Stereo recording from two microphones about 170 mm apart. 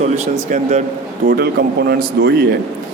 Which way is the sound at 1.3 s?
70° right (ahead or behind).